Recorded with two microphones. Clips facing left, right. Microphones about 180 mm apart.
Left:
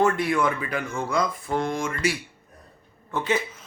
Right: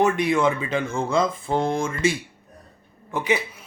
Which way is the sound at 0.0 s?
20° right (ahead or behind).